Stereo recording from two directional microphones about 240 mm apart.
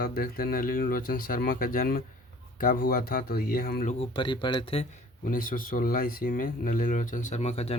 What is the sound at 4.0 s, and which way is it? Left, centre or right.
Speech, left.